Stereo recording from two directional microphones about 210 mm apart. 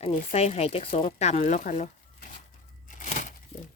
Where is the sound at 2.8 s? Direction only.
35° left (ahead or behind).